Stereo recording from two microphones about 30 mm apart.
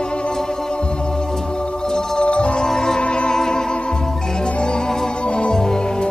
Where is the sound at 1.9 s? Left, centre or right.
Left.